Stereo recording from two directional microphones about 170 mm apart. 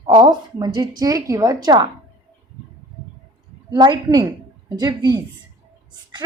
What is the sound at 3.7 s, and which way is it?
Speech, 25° right (ahead or behind).